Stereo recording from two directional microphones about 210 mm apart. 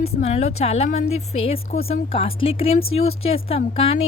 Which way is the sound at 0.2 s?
30° left (ahead or behind).